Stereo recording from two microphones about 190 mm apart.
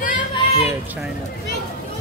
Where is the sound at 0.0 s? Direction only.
45° left (ahead or behind).